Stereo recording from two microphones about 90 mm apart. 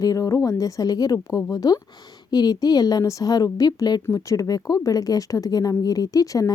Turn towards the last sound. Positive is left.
turn(degrees=40)  # may be behind; listen again after turning